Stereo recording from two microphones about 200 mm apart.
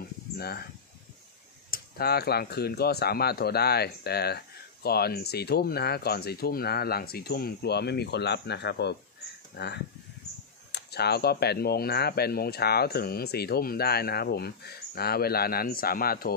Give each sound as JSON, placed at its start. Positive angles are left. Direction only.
{"t": 0.4, "sound": "speech", "side_deg": 50}
{"t": 1.7, "sound": "speech", "side_deg": 50}